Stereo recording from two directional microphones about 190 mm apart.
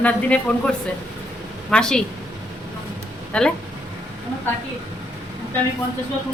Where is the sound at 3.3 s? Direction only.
5° left (ahead or behind).